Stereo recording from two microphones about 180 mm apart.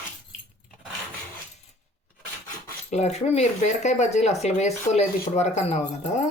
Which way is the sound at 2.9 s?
40° left (ahead or behind).